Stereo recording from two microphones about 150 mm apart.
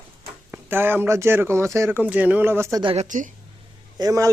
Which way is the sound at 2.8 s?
45° right (ahead or behind).